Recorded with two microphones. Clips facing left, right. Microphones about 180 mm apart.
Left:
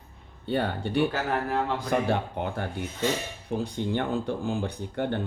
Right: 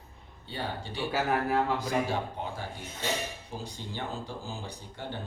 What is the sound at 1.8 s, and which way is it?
Speech, 60° left (ahead or behind).